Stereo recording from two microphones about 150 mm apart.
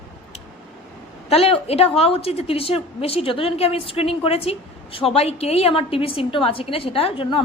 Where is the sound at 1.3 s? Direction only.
40° left (ahead or behind).